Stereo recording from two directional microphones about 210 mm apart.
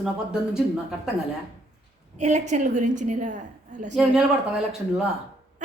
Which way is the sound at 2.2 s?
35° right (ahead or behind).